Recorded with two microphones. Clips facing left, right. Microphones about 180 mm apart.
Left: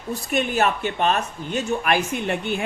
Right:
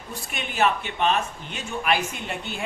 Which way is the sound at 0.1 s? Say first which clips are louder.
Left 11 dB; 45° left (ahead or behind).